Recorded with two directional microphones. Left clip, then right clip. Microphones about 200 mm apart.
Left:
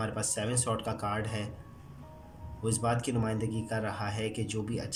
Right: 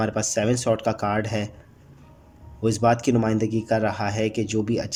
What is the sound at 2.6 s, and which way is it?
Speech, 45° right (ahead or behind).